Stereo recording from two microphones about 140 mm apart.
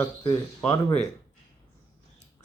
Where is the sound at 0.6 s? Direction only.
10° left (ahead or behind).